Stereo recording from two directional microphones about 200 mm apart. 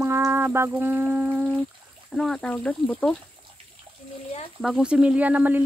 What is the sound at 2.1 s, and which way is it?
Speech, centre (ahead or behind).